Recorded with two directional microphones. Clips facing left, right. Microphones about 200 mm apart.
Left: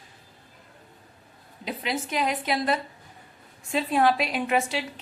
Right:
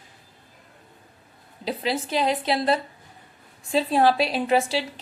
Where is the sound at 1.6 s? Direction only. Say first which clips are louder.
Right 4 dB; 30° right (ahead or behind).